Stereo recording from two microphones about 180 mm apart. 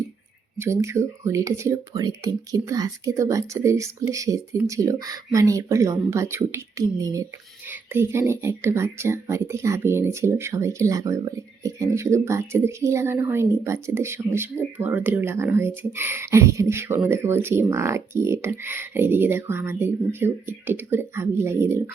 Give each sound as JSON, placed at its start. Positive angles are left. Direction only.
{"t": 0.6, "sound": "speech", "side_deg": -15}